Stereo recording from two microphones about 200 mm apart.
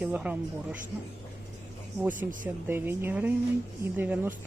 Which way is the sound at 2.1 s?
40° right (ahead or behind).